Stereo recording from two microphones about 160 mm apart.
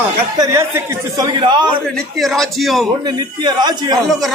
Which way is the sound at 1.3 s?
30° right (ahead or behind).